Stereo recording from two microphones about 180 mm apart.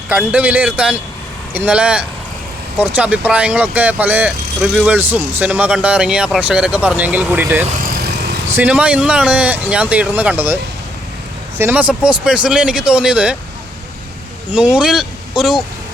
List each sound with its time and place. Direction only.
0.1 s speech: 5° right (ahead or behind)
7.8 s vehicle: 60° right (ahead or behind)
8.5 s speech: 5° right (ahead or behind)
14.5 s speech: 5° right (ahead or behind)